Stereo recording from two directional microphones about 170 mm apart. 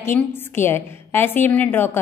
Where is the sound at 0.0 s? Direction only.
15° left (ahead or behind).